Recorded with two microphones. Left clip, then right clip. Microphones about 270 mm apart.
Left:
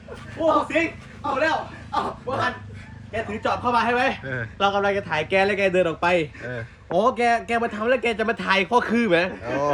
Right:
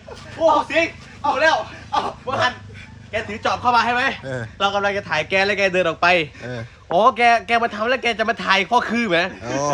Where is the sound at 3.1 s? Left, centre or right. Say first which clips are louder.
Right 3 dB; centre.